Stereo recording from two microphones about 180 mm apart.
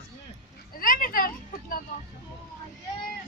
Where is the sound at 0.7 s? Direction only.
50° left (ahead or behind).